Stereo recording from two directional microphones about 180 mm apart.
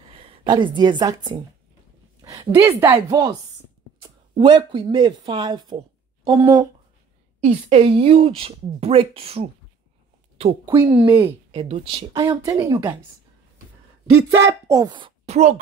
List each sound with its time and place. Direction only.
0.3 s a woman's voice: 25° right (ahead or behind)
7.3 s speech: 35° right (ahead or behind)
10.6 s a woman's voice: 25° right (ahead or behind)
11.5 s a woman's voice: 30° right (ahead or behind)
14.7 s a woman's voice: 25° right (ahead or behind); by 15.6 s 40° right (ahead or behind)